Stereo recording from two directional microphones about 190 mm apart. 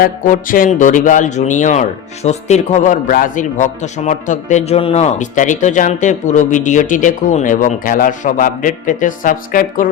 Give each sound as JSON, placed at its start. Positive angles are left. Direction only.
{"t": 0.0, "sound": "speech", "side_deg": 45}